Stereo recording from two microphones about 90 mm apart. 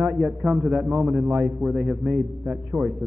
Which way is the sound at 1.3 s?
20° right (ahead or behind).